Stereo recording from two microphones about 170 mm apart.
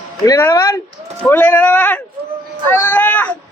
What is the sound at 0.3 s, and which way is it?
Speech, 20° left (ahead or behind).